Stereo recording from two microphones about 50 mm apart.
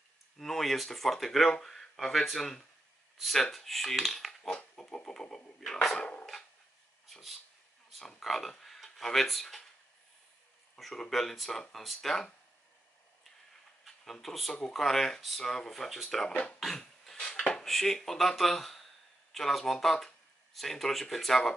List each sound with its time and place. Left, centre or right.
0.4 s speech: centre
4.4 s speech: centre
5.9 s a sound: centre
7.1 s speech: centre
10.8 s speech: centre
14.2 s speech: centre
16.7 s a sound: centre
17.3 s dishes: centre
17.6 s speech: centre